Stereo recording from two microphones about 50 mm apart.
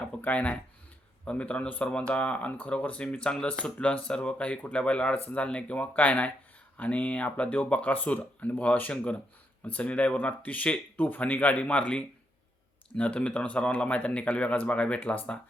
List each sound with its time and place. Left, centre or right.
0.0 s speech: left